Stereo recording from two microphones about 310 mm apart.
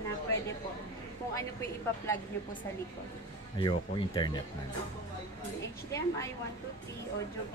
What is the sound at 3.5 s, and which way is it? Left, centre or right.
Speech, centre.